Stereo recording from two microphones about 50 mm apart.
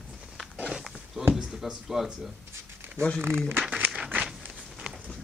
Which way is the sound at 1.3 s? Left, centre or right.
Centre.